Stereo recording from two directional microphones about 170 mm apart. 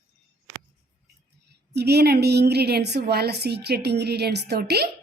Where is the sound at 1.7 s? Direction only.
75° right (ahead or behind).